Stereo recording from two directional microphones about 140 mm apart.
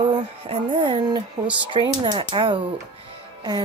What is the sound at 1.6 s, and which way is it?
Speech, 35° right (ahead or behind).